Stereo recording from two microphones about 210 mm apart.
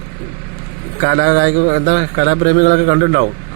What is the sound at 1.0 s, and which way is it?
Speech, 45° right (ahead or behind).